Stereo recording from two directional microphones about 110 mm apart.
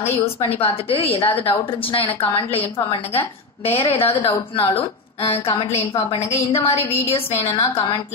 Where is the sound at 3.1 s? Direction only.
65° left (ahead or behind).